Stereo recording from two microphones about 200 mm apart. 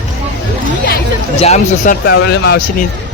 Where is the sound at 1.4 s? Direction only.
35° left (ahead or behind).